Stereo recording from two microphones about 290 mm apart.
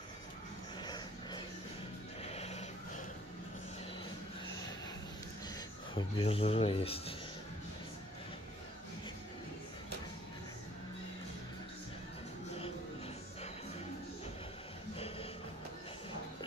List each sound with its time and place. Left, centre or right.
0.8 s music: centre
2.2 s neigh: left
5.9 s speech: centre
15.0 s music: centre